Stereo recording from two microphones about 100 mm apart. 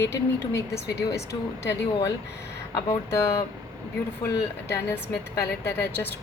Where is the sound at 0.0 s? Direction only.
25° left (ahead or behind).